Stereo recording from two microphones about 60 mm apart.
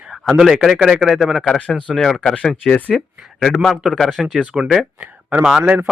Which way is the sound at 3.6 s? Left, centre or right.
Centre.